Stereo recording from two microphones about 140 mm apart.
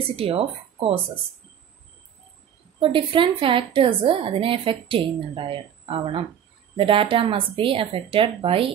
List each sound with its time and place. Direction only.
0.1 s a woman's voice: 45° right (ahead or behind)
2.8 s a woman's voice: 35° right (ahead or behind)